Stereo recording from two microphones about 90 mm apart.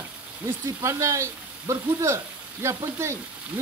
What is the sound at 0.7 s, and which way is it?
Speech, 35° right (ahead or behind).